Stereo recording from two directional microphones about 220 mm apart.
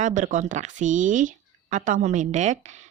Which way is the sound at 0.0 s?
35° right (ahead or behind).